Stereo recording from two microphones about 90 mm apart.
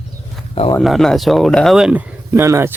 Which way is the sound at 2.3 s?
30° right (ahead or behind).